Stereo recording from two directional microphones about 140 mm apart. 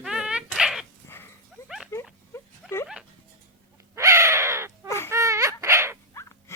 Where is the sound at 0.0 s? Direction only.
5° right (ahead or behind).